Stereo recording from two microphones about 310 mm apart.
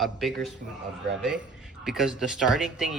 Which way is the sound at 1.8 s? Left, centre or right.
Centre.